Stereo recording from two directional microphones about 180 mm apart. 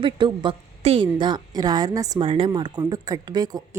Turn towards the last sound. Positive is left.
turn(degrees=-20)  # may be behind; listen again after turning